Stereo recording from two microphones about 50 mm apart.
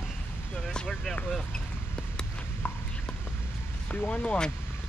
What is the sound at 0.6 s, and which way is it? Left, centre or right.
Vehicle, centre.